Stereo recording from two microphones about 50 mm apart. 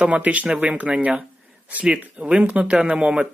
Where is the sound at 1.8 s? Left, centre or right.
Centre.